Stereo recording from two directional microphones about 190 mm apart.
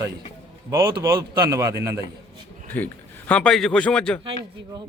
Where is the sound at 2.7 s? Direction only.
10° left (ahead or behind).